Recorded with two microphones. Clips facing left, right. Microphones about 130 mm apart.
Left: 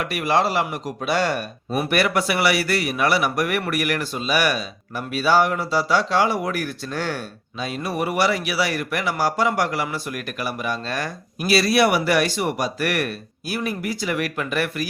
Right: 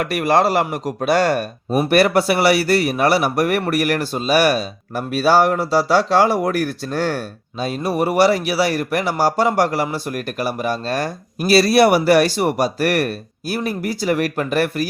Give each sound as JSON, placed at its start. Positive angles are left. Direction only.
{"t": 0.0, "sound": "a man's voice", "side_deg": -45}